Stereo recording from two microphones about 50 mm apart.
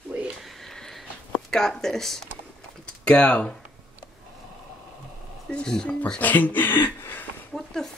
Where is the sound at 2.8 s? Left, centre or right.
Left.